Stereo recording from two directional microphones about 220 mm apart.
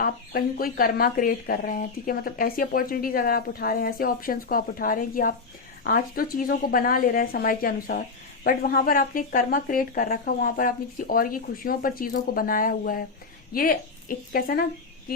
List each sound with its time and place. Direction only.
0.0 s speech: 40° left (ahead or behind)